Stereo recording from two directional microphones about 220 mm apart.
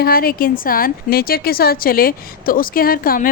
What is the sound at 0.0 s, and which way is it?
A woman's voice, 40° left (ahead or behind).